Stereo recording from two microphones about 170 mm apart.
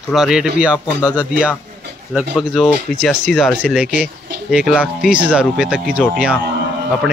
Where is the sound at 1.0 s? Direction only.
10° left (ahead or behind).